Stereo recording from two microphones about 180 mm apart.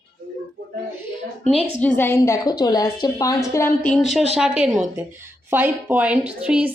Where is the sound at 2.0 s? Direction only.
15° left (ahead or behind).